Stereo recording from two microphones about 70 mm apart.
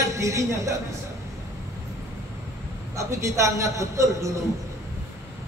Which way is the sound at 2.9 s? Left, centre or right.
Right.